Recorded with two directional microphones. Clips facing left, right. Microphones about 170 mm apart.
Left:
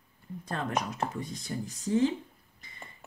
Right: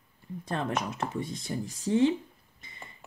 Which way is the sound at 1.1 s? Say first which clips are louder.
Right 3 dB; 25° right (ahead or behind).